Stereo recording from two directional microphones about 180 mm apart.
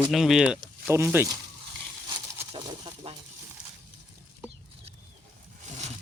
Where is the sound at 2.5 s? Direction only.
30° right (ahead or behind).